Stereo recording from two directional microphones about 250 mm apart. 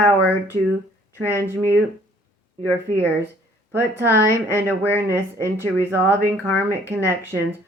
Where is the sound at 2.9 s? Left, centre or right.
Centre.